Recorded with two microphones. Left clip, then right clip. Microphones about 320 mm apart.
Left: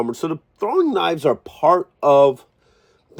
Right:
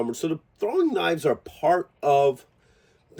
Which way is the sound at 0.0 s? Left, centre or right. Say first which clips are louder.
Left 4 dB; centre.